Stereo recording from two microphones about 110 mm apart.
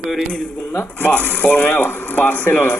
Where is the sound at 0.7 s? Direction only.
20° left (ahead or behind).